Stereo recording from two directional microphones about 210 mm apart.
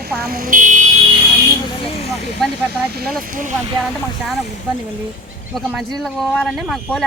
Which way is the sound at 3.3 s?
40° right (ahead or behind).